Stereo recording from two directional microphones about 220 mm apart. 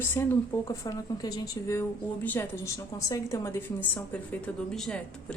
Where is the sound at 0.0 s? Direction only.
10° left (ahead or behind).